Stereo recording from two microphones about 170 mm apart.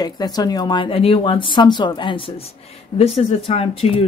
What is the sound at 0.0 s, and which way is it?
Speech, 25° left (ahead or behind).